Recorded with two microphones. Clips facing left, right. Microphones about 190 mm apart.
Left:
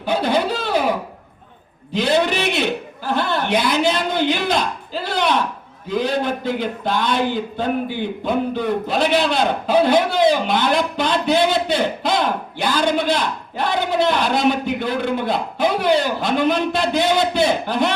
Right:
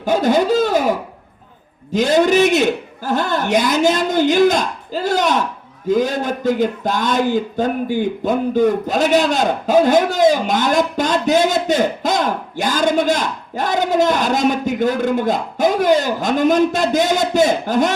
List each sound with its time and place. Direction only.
0.0 s a man's voice: 45° right (ahead or behind)